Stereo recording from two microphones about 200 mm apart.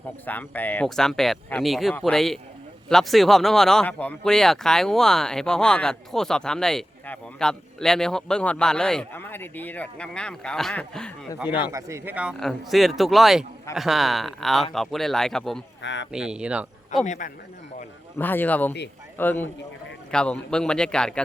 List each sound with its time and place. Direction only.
0.3 s speech: 10° left (ahead or behind)
11.7 s speech: 15° right (ahead or behind); by 15.6 s centre (ahead or behind)
15.8 s speech: 65° left (ahead or behind)
16.1 s speech: 5° right (ahead or behind)
17.0 s speech: 40° left (ahead or behind)
18.2 s a man's voice: 10° left (ahead or behind)